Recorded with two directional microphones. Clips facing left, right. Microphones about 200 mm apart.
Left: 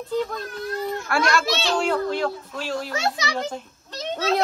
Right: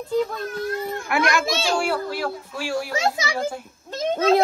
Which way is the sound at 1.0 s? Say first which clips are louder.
Right 1 dB; 15° right (ahead or behind).